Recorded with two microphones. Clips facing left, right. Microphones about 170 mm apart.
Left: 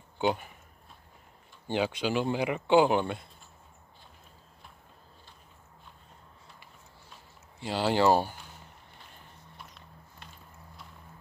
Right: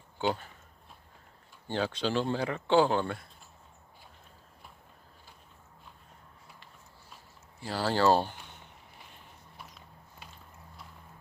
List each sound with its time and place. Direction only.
0.2 s speech: 15° left (ahead or behind)
1.7 s speech: 15° left (ahead or behind)
7.6 s speech: 20° left (ahead or behind)
9.1 s a sound: centre (ahead or behind)